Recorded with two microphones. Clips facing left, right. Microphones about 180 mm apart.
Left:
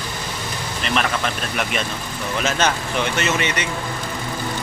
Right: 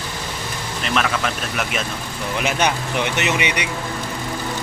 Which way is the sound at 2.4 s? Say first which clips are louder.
Even; 15° right (ahead or behind).